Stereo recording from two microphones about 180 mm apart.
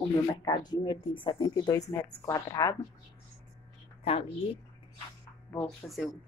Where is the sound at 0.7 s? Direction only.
25° left (ahead or behind).